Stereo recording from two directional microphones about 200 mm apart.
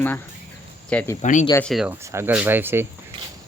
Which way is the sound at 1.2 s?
35° left (ahead or behind).